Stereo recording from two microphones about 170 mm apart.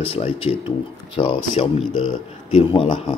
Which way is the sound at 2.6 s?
30° left (ahead or behind).